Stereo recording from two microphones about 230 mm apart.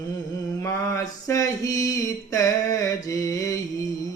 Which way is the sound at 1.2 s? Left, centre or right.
Centre.